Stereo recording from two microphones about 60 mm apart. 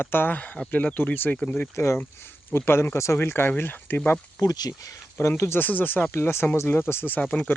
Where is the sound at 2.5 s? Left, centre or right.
Left.